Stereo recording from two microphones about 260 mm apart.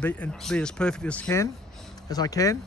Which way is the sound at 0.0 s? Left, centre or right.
Centre.